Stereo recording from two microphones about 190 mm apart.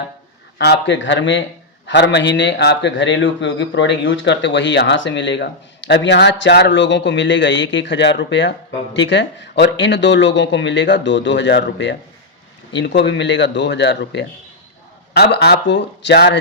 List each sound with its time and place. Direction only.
0.6 s a man's voice: 65° left (ahead or behind)